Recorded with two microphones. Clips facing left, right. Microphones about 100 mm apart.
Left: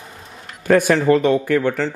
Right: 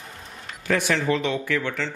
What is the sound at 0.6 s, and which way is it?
Speech, 45° left (ahead or behind).